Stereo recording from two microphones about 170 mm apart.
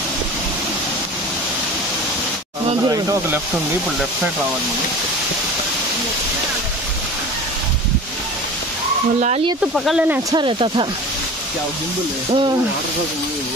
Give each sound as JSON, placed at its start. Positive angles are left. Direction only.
{"t": 2.9, "sound": "speech", "side_deg": -20}
{"t": 9.8, "sound": "speech", "side_deg": -5}
{"t": 10.3, "sound": "speech", "side_deg": -30}